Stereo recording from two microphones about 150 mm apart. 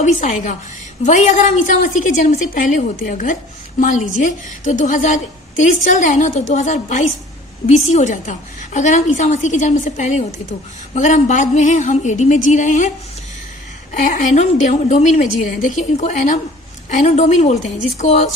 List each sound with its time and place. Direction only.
0.0 s a woman's voice: 55° left (ahead or behind)
14.0 s a woman's voice: 60° left (ahead or behind)